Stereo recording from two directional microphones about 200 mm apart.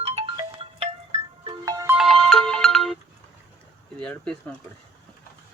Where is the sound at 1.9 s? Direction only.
Centre (ahead or behind).